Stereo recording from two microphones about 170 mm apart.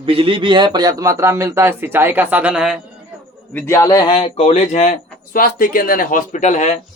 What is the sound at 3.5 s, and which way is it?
A man's voice, 15° left (ahead or behind).